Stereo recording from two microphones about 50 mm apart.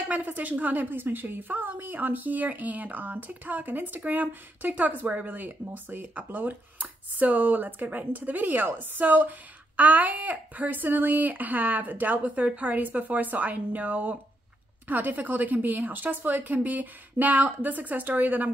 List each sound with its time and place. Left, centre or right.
0.1 s a woman's voice: right